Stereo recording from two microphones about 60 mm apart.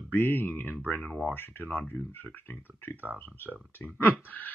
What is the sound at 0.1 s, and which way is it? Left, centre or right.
Speech, left.